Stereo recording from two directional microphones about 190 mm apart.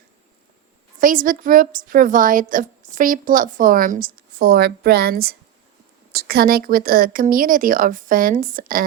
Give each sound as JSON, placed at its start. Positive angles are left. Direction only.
{"t": 0.9, "sound": "a woman's voice", "side_deg": -45}